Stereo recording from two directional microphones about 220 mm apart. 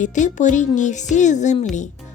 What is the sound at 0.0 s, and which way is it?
Speech, 35° left (ahead or behind).